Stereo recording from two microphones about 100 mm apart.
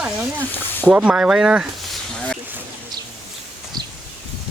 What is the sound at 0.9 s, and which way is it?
Speech, 15° right (ahead or behind).